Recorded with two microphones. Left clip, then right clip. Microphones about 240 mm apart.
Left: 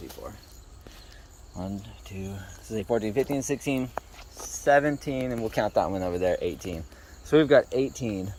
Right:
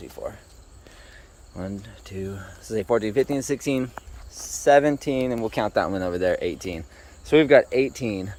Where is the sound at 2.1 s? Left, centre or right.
Centre.